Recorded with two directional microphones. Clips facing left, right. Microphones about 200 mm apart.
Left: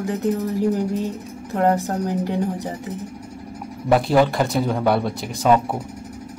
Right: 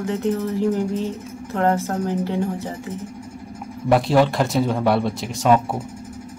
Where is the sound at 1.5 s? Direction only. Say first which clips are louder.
Left 1 dB; 15° left (ahead or behind).